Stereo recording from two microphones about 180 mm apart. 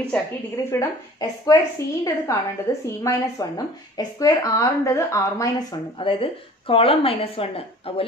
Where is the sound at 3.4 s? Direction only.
20° left (ahead or behind).